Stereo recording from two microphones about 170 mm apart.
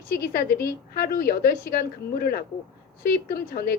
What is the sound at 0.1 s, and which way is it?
A woman's voice, 65° left (ahead or behind).